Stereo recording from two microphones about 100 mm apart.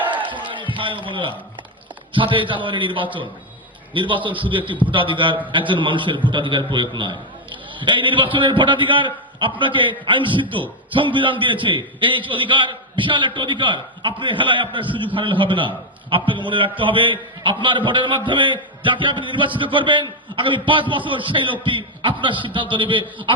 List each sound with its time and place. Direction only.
0.3 s music: 55° right (ahead or behind)
2.1 s a man's voice: 55° right (ahead or behind)